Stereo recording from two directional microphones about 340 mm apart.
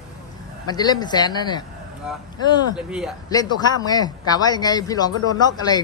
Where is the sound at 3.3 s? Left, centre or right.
Centre.